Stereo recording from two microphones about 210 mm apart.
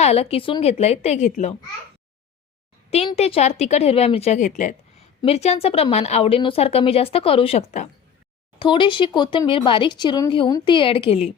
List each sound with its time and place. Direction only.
0.0 s a woman's voice: 30° left (ahead or behind)
2.9 s a woman's voice: 30° left (ahead or behind)